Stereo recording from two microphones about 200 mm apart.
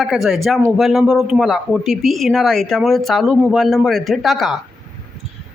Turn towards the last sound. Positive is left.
turn(degrees=0)  # may be behind; listen again after turning